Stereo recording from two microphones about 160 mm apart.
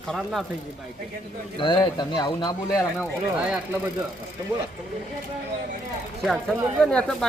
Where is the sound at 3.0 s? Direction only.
5° right (ahead or behind).